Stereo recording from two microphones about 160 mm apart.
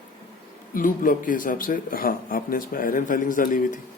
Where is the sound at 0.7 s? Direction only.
60° left (ahead or behind).